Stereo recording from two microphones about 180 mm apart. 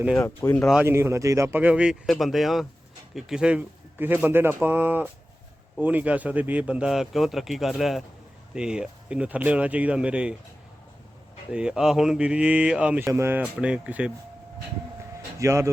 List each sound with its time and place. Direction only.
0.2 s speech: 15° left (ahead or behind)
0.7 s a man's voice: 10° right (ahead or behind)
11.5 s a man's voice: 5° right (ahead or behind)
15.4 s a man's voice: 15° right (ahead or behind)